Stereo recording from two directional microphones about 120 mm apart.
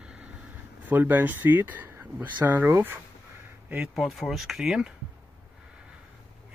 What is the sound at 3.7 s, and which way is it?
Speech, 5° right (ahead or behind).